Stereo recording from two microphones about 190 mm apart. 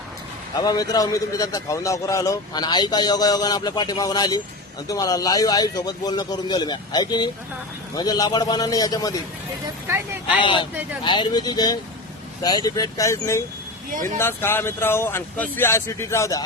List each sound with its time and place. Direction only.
0.6 s a man's voice: 20° left (ahead or behind)
9.8 s speech: 10° right (ahead or behind)
10.4 s a man's voice: 25° left (ahead or behind)